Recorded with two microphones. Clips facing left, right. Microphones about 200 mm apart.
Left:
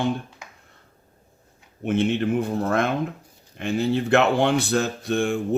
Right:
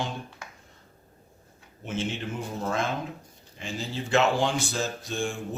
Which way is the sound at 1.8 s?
60° left (ahead or behind).